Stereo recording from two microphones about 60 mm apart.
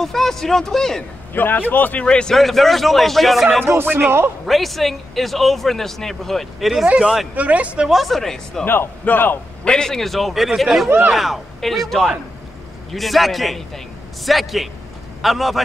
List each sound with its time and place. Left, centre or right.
0.0 s speech: centre
1.3 s a man's voice: left
2.0 s speech: centre
2.3 s speech: centre
3.6 s speech: right
4.5 s speech: centre
7.0 s speech: centre
7.3 s speech: right
7.9 s speech: centre
8.6 s a man's voice: left
9.7 s speech: centre